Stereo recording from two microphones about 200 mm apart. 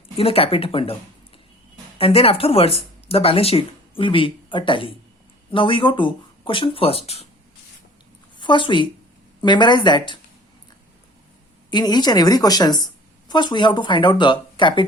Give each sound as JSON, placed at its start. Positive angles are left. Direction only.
{"t": 0.2, "sound": "a woman's voice", "side_deg": 30}
{"t": 2.0, "sound": "a woman's voice", "side_deg": 30}
{"t": 8.4, "sound": "a woman's voice", "side_deg": 25}
{"t": 11.7, "sound": "a woman's voice", "side_deg": 20}